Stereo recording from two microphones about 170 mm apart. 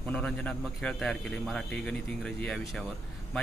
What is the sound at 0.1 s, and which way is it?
A man's voice, 5° left (ahead or behind).